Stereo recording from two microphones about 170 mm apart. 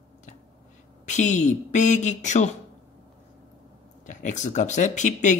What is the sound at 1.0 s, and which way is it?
Speech, 45° left (ahead or behind).